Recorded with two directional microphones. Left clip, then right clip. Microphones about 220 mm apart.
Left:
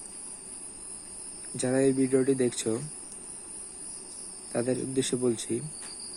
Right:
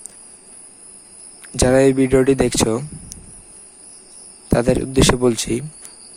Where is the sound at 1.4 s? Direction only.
45° right (ahead or behind).